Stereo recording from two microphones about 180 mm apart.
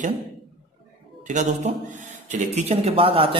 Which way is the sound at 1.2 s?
40° right (ahead or behind).